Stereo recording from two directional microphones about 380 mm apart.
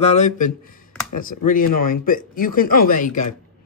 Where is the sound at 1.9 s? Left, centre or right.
Left.